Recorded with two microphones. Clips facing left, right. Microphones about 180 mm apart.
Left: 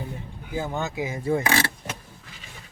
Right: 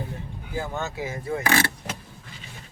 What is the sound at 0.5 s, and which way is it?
Speech, 20° left (ahead or behind).